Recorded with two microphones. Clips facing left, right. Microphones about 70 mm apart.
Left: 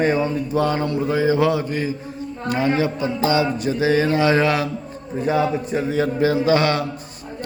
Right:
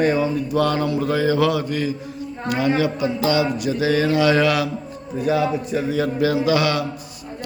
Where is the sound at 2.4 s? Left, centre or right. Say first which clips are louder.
Even; left.